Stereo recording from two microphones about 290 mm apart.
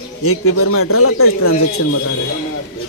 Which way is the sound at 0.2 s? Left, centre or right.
Left.